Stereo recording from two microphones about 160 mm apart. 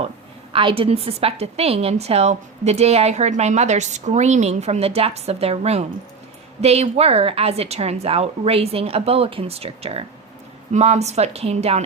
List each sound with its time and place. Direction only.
0.5 s a woman's voice: 35° right (ahead or behind)